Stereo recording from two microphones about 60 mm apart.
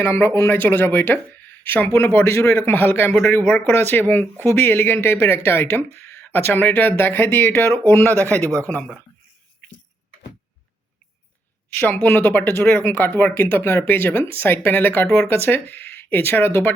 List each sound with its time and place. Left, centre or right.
0.0 s speech: left
2.2 s speech: left
8.4 s speech: right
8.6 s speech: left
11.7 s speech: left